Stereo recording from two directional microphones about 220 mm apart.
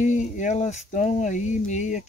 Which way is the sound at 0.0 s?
35° left (ahead or behind).